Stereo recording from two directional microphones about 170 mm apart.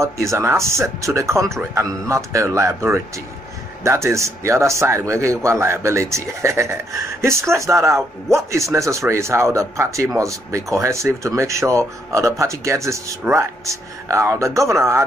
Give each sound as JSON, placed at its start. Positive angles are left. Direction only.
{"t": 0.0, "sound": "speech", "side_deg": -15}